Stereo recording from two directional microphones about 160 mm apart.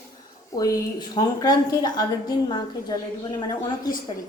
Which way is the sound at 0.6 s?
20° left (ahead or behind).